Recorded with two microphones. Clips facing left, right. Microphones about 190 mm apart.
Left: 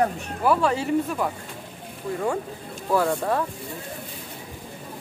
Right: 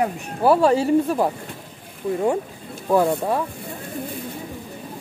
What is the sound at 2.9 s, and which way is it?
Speech, 15° right (ahead or behind).